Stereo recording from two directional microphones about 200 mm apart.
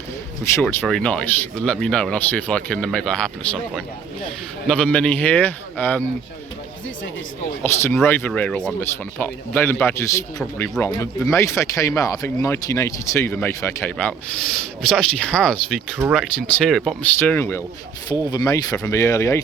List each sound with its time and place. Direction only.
0.4 s speech: 10° left (ahead or behind)
4.7 s speech: 5° left (ahead or behind)
7.6 s speech: 10° left (ahead or behind)